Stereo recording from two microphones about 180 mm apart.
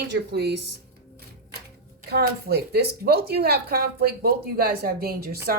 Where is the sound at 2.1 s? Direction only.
60° right (ahead or behind).